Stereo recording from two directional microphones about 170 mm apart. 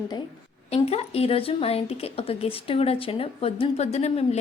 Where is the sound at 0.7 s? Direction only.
35° left (ahead or behind).